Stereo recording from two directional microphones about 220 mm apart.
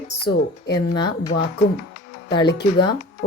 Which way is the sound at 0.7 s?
20° left (ahead or behind).